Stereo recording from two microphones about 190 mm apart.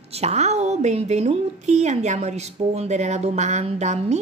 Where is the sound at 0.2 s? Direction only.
35° right (ahead or behind).